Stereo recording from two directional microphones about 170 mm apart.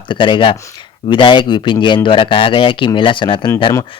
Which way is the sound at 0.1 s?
30° left (ahead or behind).